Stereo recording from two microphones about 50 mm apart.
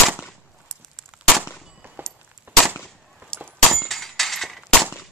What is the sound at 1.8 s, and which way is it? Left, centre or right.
Walk, right.